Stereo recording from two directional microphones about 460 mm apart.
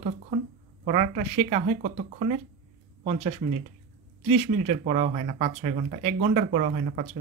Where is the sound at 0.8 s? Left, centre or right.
Centre.